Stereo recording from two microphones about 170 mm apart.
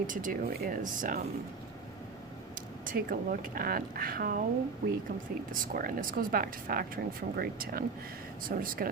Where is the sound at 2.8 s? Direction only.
55° right (ahead or behind).